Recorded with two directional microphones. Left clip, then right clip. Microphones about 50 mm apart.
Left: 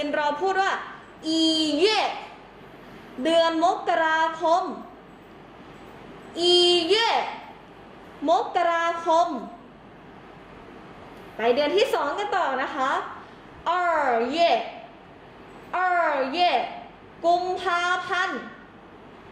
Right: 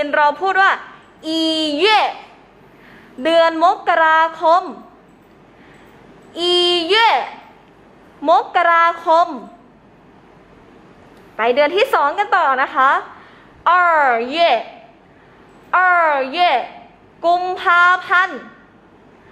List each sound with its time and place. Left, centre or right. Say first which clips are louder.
0.2 s a man's voice: right 10 dB; right
3.2 s a woman's voice: right 7 dB; right
6.3 s a woman's voice: right 4 dB; right
8.2 s a woman's voice: right 8 dB; right
11.4 s a woman's voice: right 6 dB; right
15.8 s a woman's voice: right 8 dB; right